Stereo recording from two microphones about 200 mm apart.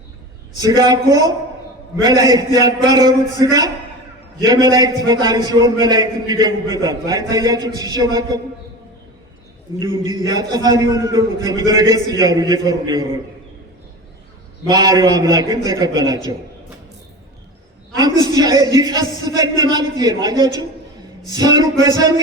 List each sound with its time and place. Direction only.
0.5 s a man's voice: 20° right (ahead or behind)
9.8 s a man's voice: 20° right (ahead or behind)
14.7 s a man's voice: 20° right (ahead or behind)
17.9 s a man's voice: 20° right (ahead or behind)